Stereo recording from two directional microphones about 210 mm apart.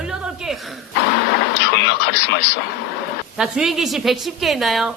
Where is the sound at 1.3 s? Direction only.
55° left (ahead or behind).